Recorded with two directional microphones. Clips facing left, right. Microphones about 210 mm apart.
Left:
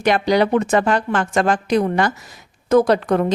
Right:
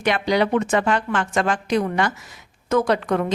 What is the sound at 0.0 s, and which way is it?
A woman's voice, 40° left (ahead or behind).